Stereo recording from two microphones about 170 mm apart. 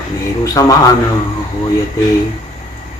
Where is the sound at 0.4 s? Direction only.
20° left (ahead or behind).